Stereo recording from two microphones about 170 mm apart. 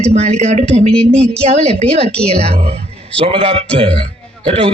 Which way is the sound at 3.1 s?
35° right (ahead or behind).